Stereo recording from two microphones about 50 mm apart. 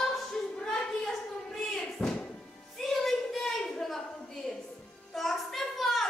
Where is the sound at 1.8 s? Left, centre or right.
Centre.